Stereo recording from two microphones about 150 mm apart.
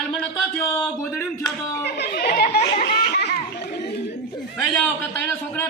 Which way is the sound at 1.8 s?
90° left.